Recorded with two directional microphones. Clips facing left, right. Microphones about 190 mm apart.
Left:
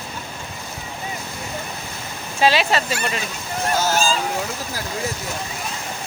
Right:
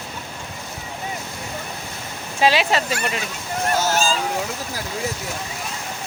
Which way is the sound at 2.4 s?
15° right (ahead or behind).